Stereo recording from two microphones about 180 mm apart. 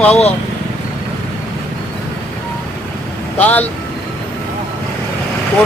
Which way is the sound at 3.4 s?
10° left (ahead or behind).